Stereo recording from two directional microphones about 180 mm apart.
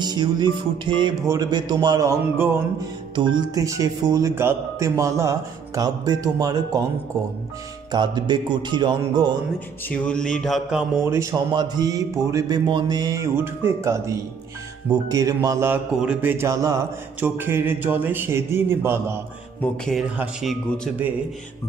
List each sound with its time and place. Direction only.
0.0 s speech: 25° right (ahead or behind)
7.9 s speech: 25° right (ahead or behind)
9.8 s mantra: 5° left (ahead or behind)
11.1 s speech: 15° right (ahead or behind)
19.6 s mantra: 5° left (ahead or behind)